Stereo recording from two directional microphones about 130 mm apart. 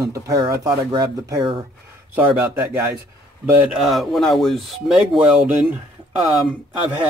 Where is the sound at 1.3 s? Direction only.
40° right (ahead or behind).